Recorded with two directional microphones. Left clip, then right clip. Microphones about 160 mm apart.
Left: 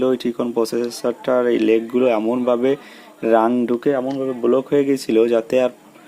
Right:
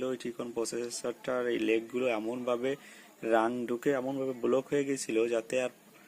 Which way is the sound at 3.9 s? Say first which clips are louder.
Left 8 dB; 15° right (ahead or behind).